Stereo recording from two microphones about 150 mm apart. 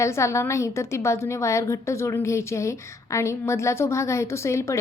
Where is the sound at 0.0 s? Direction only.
20° left (ahead or behind).